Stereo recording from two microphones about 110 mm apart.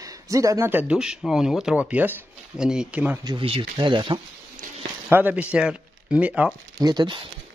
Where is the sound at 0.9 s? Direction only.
5° right (ahead or behind).